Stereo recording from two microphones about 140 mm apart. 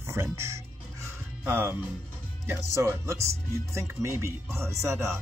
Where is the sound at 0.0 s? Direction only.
20° right (ahead or behind).